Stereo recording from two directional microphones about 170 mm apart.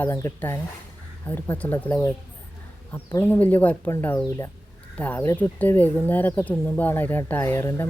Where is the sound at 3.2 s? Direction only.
10° left (ahead or behind).